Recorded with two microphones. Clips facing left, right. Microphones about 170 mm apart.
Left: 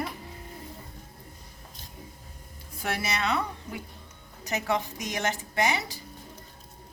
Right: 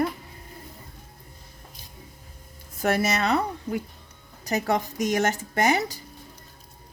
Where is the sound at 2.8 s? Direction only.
45° right (ahead or behind).